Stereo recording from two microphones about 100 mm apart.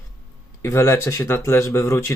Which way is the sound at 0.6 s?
25° left (ahead or behind).